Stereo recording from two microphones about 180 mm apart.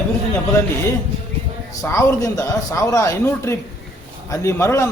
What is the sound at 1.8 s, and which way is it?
A man's voice, 15° left (ahead or behind).